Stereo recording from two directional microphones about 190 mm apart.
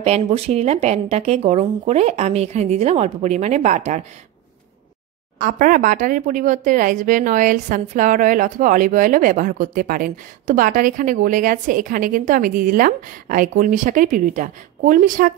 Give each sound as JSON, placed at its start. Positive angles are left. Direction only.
{"t": 0.0, "sound": "speech", "side_deg": -35}
{"t": 5.4, "sound": "speech", "side_deg": -45}